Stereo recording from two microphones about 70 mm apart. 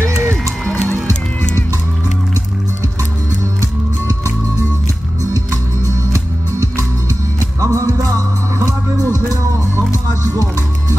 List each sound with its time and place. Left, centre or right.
0.7 s music: left
7.6 s music: right
8.6 s music: left